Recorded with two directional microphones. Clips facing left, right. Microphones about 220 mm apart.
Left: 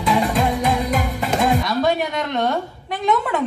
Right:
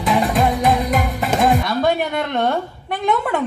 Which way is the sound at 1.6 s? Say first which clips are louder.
Right 1 dB; 55° right (ahead or behind).